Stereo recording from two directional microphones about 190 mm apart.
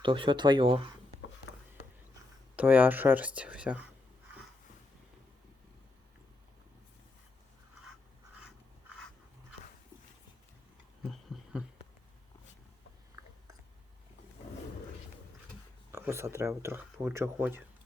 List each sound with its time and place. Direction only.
0.0 s speech: 25° right (ahead or behind)
2.6 s speech: 10° right (ahead or behind)
11.3 s a sound: centre (ahead or behind)
15.9 s speech: 15° right (ahead or behind)